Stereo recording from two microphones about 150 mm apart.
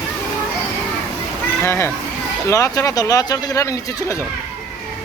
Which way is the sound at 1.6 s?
15° left (ahead or behind).